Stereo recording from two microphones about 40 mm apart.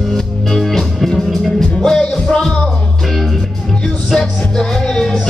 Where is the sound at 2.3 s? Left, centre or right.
Left.